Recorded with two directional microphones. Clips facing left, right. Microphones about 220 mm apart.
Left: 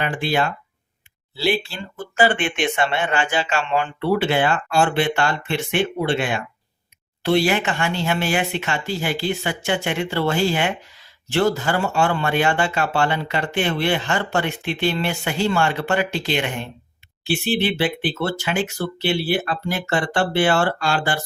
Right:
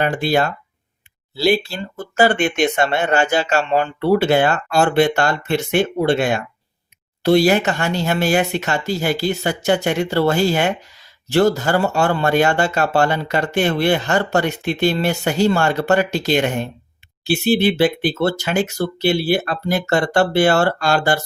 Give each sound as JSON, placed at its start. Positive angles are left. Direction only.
{"t": 0.0, "sound": "speech", "side_deg": -40}